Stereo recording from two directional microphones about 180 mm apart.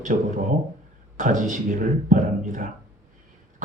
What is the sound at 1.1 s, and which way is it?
Speech, 45° right (ahead or behind).